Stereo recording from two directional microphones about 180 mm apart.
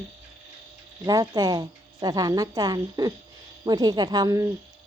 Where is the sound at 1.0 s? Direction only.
20° right (ahead or behind).